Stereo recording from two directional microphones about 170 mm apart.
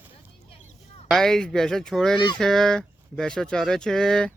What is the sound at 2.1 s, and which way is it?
Speech, 25° left (ahead or behind).